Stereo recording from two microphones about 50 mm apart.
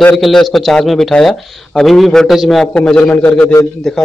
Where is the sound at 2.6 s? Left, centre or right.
Centre.